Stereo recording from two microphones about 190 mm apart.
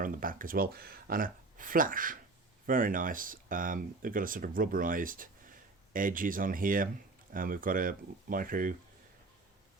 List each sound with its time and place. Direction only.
0.0 s speech: 45° right (ahead or behind)